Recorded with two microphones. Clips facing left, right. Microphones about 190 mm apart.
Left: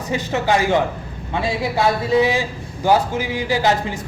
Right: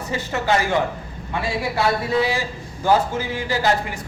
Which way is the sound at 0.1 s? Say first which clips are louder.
Left 2 dB; 20° left (ahead or behind).